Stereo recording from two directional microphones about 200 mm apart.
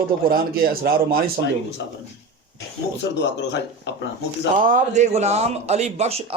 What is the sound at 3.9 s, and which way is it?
Speech, 60° left (ahead or behind).